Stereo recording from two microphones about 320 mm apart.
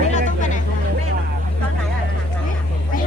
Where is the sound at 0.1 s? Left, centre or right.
Left.